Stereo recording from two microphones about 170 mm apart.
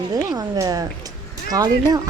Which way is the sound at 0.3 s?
20° right (ahead or behind).